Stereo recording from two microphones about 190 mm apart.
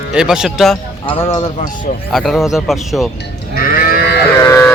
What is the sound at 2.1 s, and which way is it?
Speech, centre (ahead or behind).